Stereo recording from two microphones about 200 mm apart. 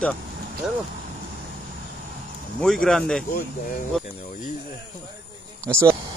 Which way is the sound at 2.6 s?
5° left (ahead or behind).